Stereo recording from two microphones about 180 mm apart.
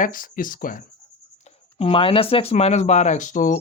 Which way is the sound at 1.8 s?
30° left (ahead or behind).